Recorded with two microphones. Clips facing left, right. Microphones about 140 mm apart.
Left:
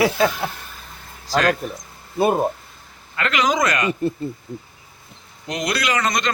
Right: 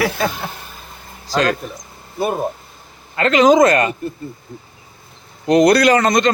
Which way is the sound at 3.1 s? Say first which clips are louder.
Right 9 dB; 30° right (ahead or behind).